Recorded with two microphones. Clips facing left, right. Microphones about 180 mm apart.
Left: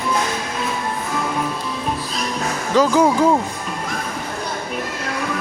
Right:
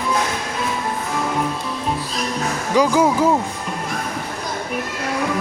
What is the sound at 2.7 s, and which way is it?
Speech, 10° right (ahead or behind).